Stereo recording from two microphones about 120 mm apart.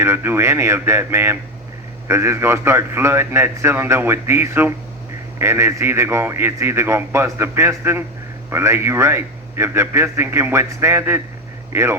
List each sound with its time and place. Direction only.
0.0 s a man's voice: 20° right (ahead or behind)